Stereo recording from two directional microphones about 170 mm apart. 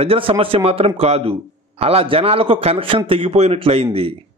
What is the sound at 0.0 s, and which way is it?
Speech, 35° right (ahead or behind).